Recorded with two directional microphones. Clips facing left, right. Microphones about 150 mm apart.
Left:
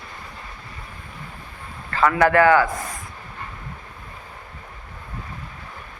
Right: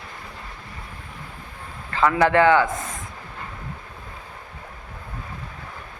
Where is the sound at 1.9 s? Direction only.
20° right (ahead or behind).